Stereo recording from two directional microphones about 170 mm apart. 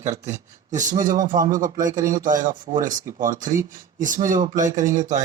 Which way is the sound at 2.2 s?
50° right (ahead or behind).